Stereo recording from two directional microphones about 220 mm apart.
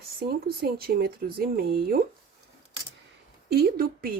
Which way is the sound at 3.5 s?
45° right (ahead or behind).